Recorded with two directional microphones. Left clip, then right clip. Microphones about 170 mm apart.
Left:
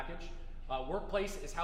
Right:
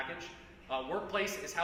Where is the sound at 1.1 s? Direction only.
45° left (ahead or behind).